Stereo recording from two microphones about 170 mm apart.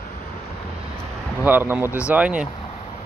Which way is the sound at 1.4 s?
10° right (ahead or behind).